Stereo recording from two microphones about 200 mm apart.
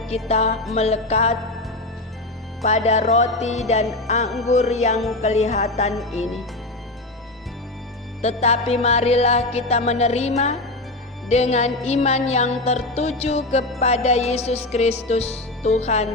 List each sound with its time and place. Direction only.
0.1 s music: 30° left (ahead or behind)
2.6 s music: 35° left (ahead or behind)
4.9 s music: centre (ahead or behind)
5.2 s music: 35° left (ahead or behind)
8.2 s music: 35° left (ahead or behind)